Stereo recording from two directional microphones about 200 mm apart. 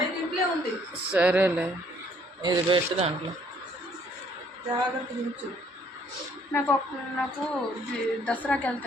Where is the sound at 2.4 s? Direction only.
20° right (ahead or behind).